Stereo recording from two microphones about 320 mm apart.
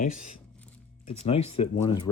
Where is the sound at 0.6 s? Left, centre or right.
Centre.